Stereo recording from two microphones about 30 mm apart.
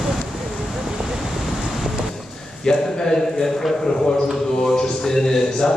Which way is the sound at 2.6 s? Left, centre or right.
Centre.